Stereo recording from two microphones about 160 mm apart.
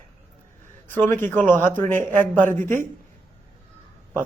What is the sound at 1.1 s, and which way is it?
A man's voice, 10° left (ahead or behind).